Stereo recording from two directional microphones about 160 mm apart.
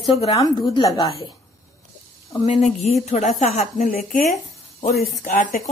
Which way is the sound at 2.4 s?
45° left (ahead or behind).